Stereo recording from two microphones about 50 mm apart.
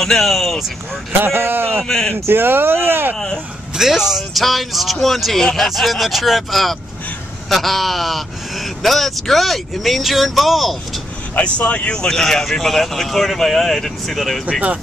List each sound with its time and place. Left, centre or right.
0.0 s speech: centre
1.2 s speech: right
3.7 s speech: centre
5.4 s speech: centre
5.7 s speech: centre
11.3 s speech: left; by 14.4 s centre